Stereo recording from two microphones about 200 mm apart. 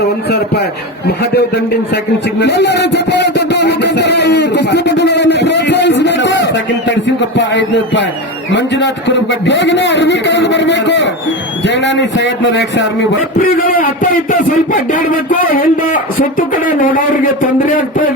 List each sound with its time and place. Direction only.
1.0 s a man's voice: 55° left (ahead or behind)
2.4 s music: 60° left (ahead or behind)
8.5 s a man's voice: 60° left (ahead or behind)
13.4 s a man's voice: 45° left (ahead or behind)